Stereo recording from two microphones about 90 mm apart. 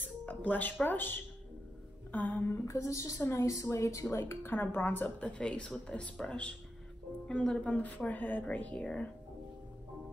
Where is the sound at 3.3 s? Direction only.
35° left (ahead or behind); by 9.1 s 10° left (ahead or behind).